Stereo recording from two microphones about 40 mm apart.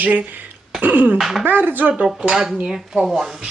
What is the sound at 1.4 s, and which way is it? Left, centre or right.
Speech, right.